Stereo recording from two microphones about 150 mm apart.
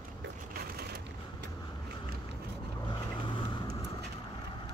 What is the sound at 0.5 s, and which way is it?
Vehicle, 90° right.